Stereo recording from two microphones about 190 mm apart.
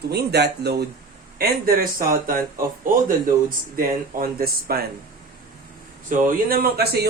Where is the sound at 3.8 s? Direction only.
50° right (ahead or behind).